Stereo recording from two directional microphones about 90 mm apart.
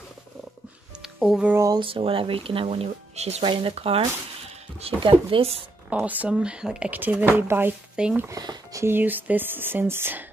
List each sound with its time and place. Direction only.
1.0 s music: 5° right (ahead or behind)
1.8 s speech: 80° right
5.9 s speech: 20° right (ahead or behind)
7.9 s speech: 10° right (ahead or behind)
8.3 s speech: 40° right (ahead or behind)
8.8 s speech: 20° right (ahead or behind)